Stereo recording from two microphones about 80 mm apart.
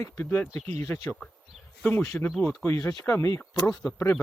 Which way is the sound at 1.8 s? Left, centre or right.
Left.